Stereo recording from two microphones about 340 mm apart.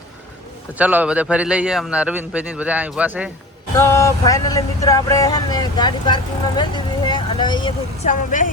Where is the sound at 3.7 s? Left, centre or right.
Centre.